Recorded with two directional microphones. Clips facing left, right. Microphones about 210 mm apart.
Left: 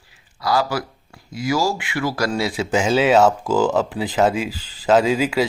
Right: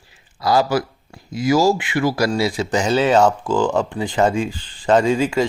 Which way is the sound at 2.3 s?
Centre (ahead or behind).